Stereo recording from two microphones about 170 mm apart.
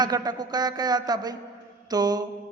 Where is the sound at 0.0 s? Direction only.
25° right (ahead or behind).